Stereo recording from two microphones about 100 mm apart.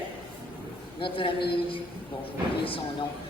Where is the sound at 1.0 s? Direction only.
60° left (ahead or behind).